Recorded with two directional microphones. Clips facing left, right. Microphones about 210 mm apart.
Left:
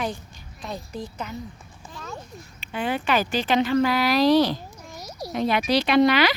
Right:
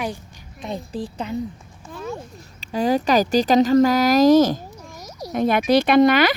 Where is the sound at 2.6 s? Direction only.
40° right (ahead or behind).